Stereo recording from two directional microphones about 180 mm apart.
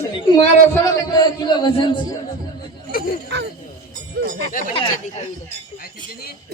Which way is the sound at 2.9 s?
55° left (ahead or behind).